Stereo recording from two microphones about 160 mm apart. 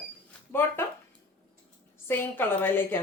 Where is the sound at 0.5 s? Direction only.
15° left (ahead or behind).